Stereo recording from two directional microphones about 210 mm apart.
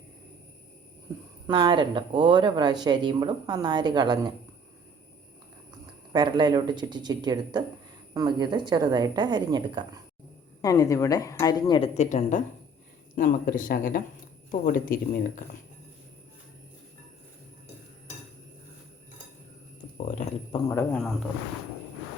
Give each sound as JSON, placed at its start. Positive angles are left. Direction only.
{"t": 1.5, "sound": "speech", "side_deg": -20}
{"t": 6.1, "sound": "speech", "side_deg": -20}
{"t": 10.6, "sound": "speech", "side_deg": 15}
{"t": 11.9, "sound": "speech", "side_deg": 35}
{"t": 20.1, "sound": "speech", "side_deg": 35}
{"t": 20.7, "sound": "speech", "side_deg": 15}